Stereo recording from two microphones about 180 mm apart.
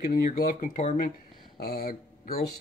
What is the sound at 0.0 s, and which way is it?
Speech, 55° left (ahead or behind).